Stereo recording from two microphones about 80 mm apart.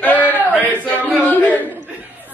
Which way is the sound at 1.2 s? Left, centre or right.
Left.